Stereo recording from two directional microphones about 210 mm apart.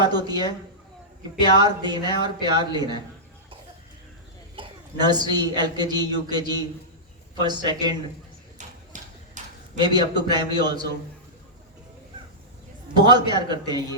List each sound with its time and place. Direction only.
0.0 s a woman's voice: 20° right (ahead or behind)
1.5 s a woman's voice: 20° right (ahead or behind)
4.5 s a woman's voice: 20° right (ahead or behind)
8.5 s a sound: 35° right (ahead or behind)
9.8 s a woman's voice: 20° right (ahead or behind)
13.0 s a woman's voice: 20° right (ahead or behind)